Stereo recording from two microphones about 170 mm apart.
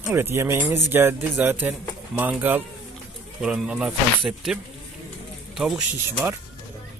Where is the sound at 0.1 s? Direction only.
15° right (ahead or behind).